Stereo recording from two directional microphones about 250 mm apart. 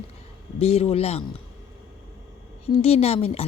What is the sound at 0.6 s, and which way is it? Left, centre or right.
Speech, left.